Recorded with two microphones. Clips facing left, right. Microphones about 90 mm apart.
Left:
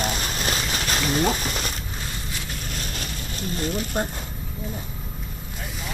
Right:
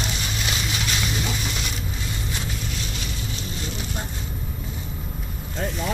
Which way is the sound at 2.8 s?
50° left (ahead or behind).